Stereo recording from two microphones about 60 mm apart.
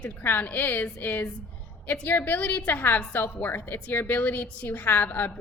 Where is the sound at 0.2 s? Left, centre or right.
Left.